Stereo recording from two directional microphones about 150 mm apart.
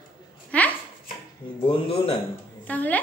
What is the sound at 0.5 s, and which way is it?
Speech, 10° left (ahead or behind).